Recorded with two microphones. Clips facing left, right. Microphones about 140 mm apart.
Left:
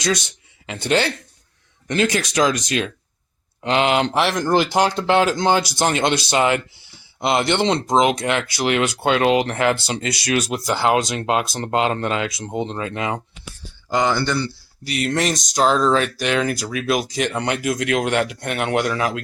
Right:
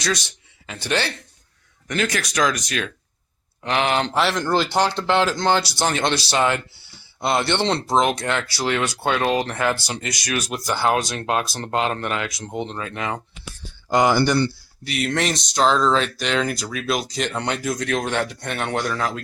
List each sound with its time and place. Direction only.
0.0 s speech: 20° left (ahead or behind)
13.9 s speech: 15° right (ahead or behind)
15.0 s speech: 5° left (ahead or behind)
15.4 s speech: 45° left (ahead or behind)
15.6 s speech: 10° left (ahead or behind)